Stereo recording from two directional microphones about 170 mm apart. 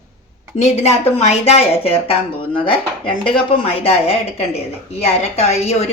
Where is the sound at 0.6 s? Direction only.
40° left (ahead or behind).